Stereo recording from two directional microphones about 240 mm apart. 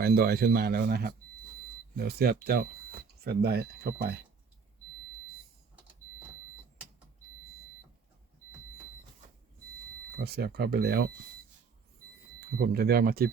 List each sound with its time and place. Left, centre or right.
0.0 s speech: right
10.2 s speech: right
12.5 s speech: right